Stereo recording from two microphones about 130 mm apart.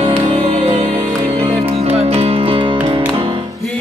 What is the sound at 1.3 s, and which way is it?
Music, 45° right (ahead or behind).